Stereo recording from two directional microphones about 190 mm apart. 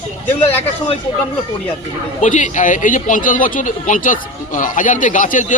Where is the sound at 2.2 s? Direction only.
40° left (ahead or behind).